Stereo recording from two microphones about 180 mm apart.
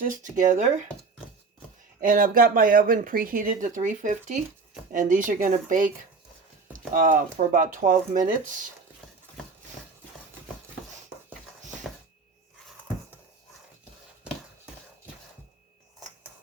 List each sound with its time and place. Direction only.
0.0 s speech: 45° right (ahead or behind)
2.0 s speech: 50° right (ahead or behind)